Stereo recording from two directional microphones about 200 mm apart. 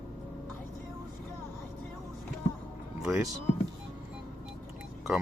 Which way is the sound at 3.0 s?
5° right (ahead or behind).